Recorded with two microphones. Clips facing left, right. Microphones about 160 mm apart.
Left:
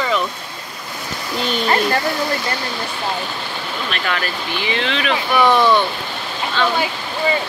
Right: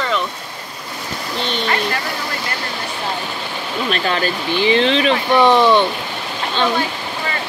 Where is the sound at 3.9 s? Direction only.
30° right (ahead or behind).